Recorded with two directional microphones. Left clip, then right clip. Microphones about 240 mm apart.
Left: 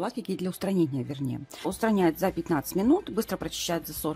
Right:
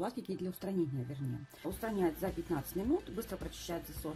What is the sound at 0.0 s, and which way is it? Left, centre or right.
Speech, left.